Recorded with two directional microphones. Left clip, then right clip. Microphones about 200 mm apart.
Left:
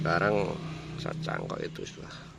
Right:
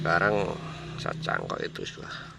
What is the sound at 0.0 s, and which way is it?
Speech, centre (ahead or behind).